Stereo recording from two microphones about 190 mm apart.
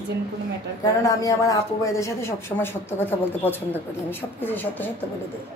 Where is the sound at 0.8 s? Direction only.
20° left (ahead or behind).